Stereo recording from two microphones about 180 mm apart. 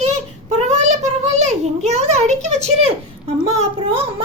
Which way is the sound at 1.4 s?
40° right (ahead or behind).